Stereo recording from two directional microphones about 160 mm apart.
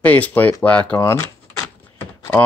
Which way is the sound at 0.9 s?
15° left (ahead or behind).